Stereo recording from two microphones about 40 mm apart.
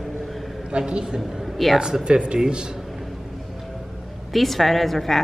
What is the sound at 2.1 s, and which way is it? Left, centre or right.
Speech, right.